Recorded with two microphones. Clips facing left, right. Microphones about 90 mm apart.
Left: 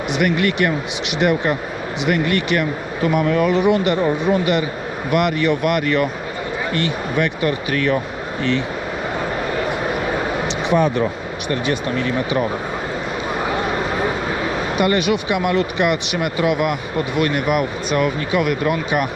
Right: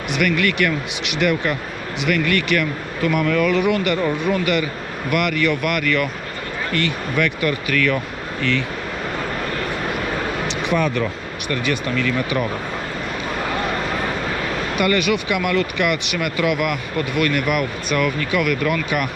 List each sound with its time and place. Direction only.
0.1 s speech: 25° left (ahead or behind)
10.7 s speech: 25° left (ahead or behind)
14.8 s speech: 25° left (ahead or behind)